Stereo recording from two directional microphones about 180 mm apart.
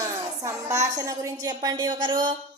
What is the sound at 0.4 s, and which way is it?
A woman's voice, 20° right (ahead or behind).